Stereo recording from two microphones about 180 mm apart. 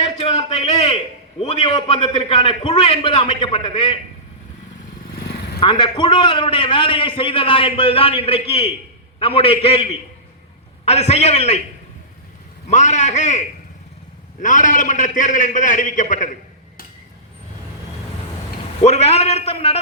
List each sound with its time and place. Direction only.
0.2 s a man's voice: 35° left (ahead or behind)
5.5 s a man's voice: 25° left (ahead or behind)
12.6 s a man's voice: 40° left (ahead or behind)
14.4 s a man's voice: 45° left (ahead or behind)
18.8 s a man's voice: 35° left (ahead or behind)